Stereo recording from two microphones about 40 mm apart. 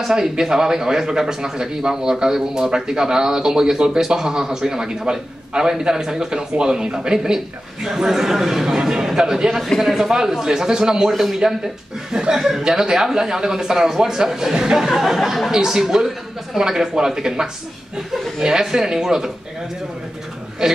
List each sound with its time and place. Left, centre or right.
0.0 s a man's voice: centre
9.8 s a man's voice: centre
11.1 s speech: centre
12.1 s a man's voice: centre
14.9 s a man's voice: centre
20.6 s a man's voice: centre